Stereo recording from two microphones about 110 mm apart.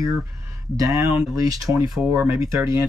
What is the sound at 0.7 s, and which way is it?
Speech, 30° right (ahead or behind).